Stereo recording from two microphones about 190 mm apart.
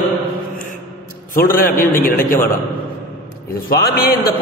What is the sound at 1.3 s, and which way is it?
A man's voice, 50° left (ahead or behind).